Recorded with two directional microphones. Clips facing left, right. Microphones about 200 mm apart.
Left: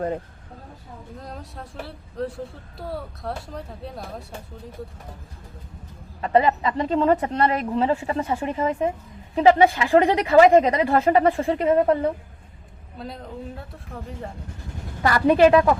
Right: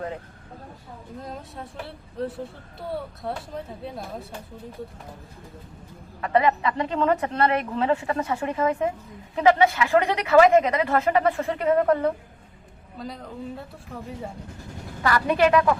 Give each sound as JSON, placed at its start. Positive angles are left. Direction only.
{"t": 1.2, "sound": "speech", "side_deg": 0}
{"t": 6.2, "sound": "a woman's voice", "side_deg": 30}
{"t": 15.0, "sound": "a woman's voice", "side_deg": 35}